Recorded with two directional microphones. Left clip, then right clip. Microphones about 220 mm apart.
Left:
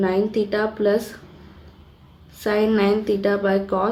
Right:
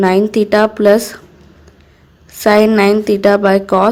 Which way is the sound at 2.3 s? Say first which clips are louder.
Right 10 dB; 35° right (ahead or behind).